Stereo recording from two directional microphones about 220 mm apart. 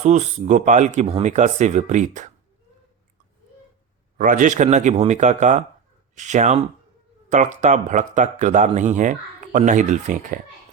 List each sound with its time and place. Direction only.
0.0 s speech: 30° right (ahead or behind)
4.2 s speech: 35° right (ahead or behind)